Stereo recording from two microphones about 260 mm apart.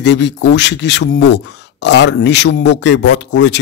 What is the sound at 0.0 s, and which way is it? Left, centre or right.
A man's voice, left.